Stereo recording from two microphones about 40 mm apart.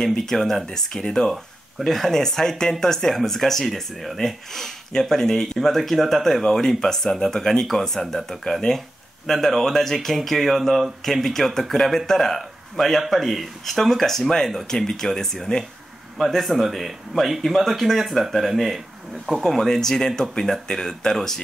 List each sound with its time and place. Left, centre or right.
0.0 s speech: centre
1.0 s speech: centre
1.3 s speech: centre
16.2 s speech: centre